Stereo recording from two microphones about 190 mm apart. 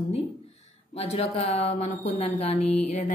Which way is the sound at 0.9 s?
35° left (ahead or behind).